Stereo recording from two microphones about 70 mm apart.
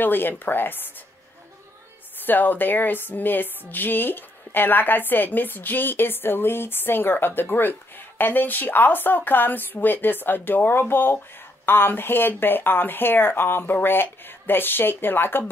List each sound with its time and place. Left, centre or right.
0.0 s speech: left
2.2 s speech: left